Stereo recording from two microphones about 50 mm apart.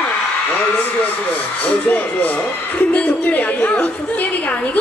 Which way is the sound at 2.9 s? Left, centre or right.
Left.